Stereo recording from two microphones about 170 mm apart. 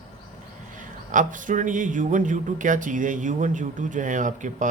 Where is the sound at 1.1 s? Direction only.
50° right (ahead or behind).